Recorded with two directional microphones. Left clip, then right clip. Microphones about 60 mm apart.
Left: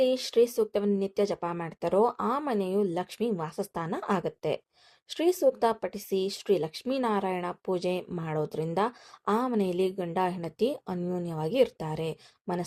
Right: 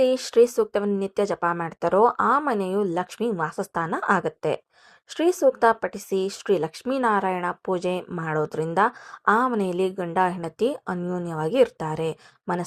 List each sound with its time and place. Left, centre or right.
0.0 s speech: right